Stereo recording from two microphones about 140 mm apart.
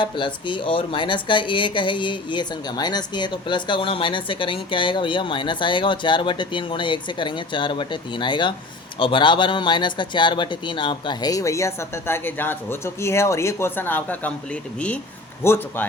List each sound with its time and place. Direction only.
0.0 s speech: 35° left (ahead or behind); by 15.9 s 15° left (ahead or behind)